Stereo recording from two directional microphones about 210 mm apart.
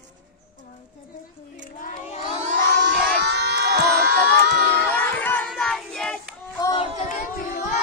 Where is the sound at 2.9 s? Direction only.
55° right (ahead or behind).